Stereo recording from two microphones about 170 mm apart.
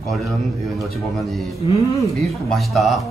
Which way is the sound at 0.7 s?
Centre (ahead or behind).